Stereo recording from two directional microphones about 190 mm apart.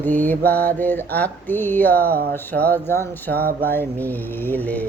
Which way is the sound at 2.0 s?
50° right (ahead or behind).